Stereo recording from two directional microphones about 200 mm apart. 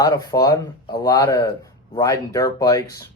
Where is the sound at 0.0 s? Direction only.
20° left (ahead or behind).